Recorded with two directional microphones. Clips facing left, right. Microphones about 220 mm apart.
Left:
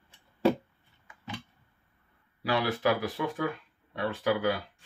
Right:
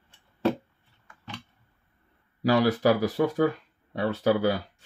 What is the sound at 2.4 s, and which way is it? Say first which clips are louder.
Speech: right 6 dB; 40° right (ahead or behind).